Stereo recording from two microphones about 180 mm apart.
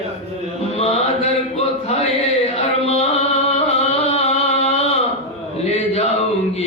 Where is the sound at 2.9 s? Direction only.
35° left (ahead or behind).